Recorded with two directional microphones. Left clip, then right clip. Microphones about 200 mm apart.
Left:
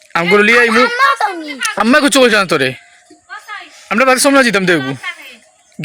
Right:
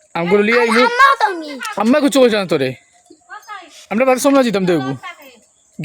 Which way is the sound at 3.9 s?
Centre (ahead or behind).